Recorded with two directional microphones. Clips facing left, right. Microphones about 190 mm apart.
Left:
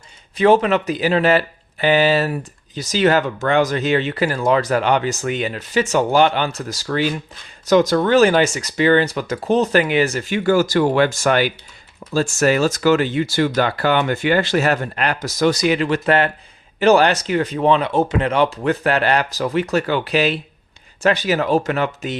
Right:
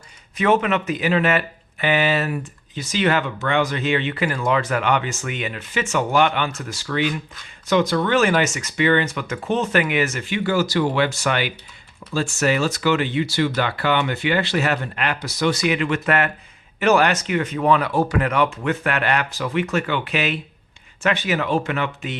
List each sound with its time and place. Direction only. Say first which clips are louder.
0.3 s speech: left 5 dB; 35° left (ahead or behind)